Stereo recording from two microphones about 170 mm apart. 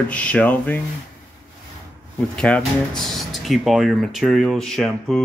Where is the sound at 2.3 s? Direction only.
5° left (ahead or behind).